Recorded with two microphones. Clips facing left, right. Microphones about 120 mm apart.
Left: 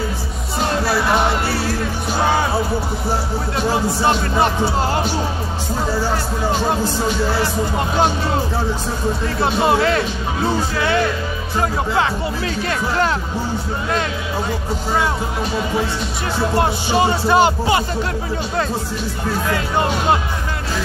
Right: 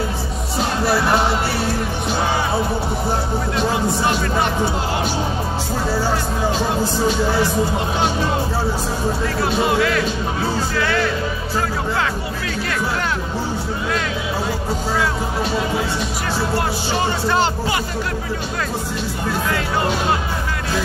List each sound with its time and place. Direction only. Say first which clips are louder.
9.4 s speech: left 3 dB; 30° left (ahead or behind)
16.5 s speech: left 4 dB; 15° left (ahead or behind)